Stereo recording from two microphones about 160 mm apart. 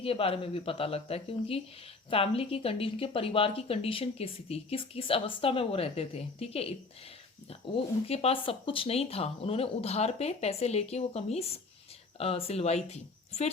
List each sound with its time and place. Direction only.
0.0 s speech: 35° left (ahead or behind)
8.0 s speech: 40° left (ahead or behind)